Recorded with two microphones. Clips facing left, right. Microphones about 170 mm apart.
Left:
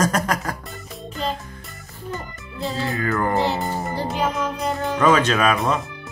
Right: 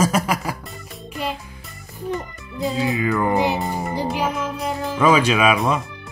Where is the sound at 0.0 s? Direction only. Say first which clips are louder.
Right 1 dB; 10° right (ahead or behind).